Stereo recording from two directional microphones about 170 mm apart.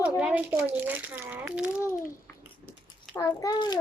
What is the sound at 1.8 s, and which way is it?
A child's voice, 15° left (ahead or behind).